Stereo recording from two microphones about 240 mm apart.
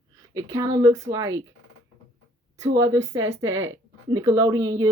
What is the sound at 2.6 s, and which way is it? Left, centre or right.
Speech, centre.